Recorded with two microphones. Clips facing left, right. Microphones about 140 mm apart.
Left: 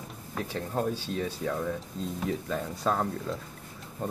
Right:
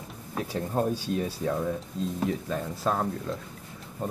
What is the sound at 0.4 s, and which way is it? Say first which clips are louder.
Speech: right 3 dB; 10° right (ahead or behind).